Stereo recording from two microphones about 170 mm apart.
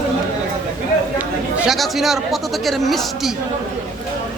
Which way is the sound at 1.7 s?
Centre (ahead or behind).